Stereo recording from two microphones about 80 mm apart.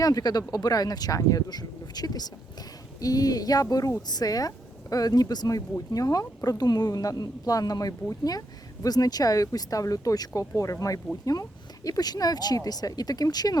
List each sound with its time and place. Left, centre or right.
0.0 s speech: left